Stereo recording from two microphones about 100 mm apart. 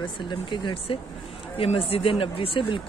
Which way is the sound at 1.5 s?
75° left (ahead or behind).